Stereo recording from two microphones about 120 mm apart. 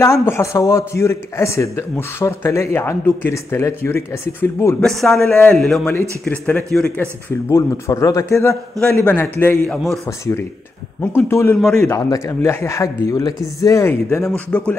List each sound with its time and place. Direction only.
0.0 s a man's voice: 25° left (ahead or behind)
4.7 s a man's voice: 5° left (ahead or behind)
7.4 s a man's voice: 25° left (ahead or behind)
11.0 s a man's voice: 20° left (ahead or behind)